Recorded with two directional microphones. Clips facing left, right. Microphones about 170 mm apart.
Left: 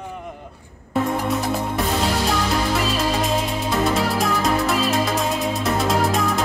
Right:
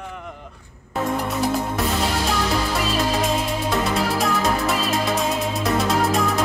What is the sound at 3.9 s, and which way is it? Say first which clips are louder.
Music: even; centre (ahead or behind).